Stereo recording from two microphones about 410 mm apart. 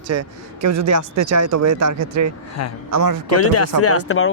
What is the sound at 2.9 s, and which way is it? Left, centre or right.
Speech, right.